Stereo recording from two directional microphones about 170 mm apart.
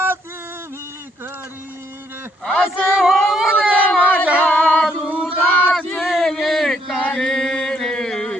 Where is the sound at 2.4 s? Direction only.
Centre (ahead or behind).